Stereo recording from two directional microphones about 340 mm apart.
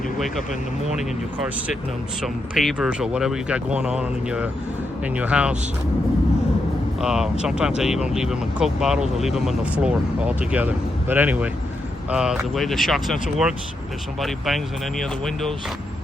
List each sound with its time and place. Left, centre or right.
2.2 s speech: centre
7.0 s speech: centre